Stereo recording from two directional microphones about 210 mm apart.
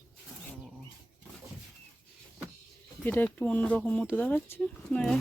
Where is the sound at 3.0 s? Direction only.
10° left (ahead or behind).